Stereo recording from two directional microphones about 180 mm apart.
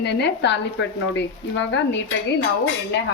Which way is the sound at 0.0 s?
70° left (ahead or behind).